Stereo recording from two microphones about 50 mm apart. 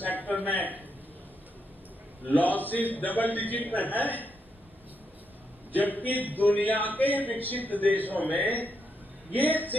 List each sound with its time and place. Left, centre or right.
0.0 s a sound: left
2.2 s a man's voice: left
5.8 s a man's voice: left